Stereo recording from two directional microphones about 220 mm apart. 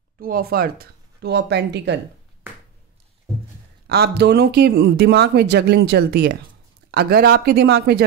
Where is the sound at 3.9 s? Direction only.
50° right (ahead or behind).